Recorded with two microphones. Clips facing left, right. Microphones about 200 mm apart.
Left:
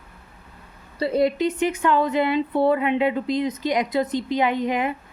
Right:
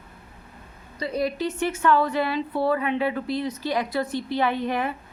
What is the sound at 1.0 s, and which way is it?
A woman's voice, 25° left (ahead or behind).